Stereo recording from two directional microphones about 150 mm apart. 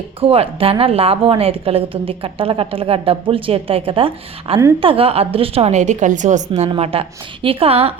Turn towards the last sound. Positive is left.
turn(degrees=-40)  # may be behind; listen again after turning